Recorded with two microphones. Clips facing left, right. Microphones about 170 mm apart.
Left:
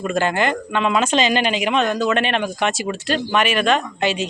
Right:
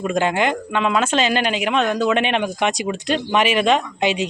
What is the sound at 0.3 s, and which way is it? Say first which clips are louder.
Speech: even; 5° right (ahead or behind).